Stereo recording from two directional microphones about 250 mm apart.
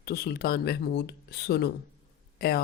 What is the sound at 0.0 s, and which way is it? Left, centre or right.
Speech, left.